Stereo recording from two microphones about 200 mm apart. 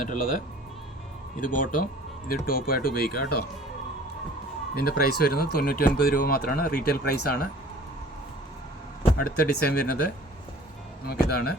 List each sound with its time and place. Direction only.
0.1 s speech: 45° left (ahead or behind)
4.7 s speech: 50° left (ahead or behind)
9.2 s speech: 50° left (ahead or behind)
11.0 s speech: 50° left (ahead or behind)